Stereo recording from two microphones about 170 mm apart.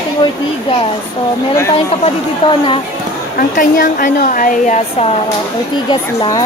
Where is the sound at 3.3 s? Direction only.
55° left (ahead or behind).